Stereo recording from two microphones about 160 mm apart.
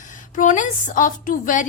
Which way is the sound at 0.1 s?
55° left (ahead or behind).